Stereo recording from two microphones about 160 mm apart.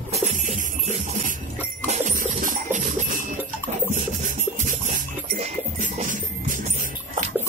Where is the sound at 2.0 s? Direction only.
55° right (ahead or behind).